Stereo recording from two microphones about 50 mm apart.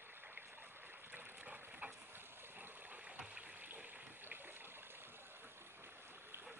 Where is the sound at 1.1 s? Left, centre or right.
Right.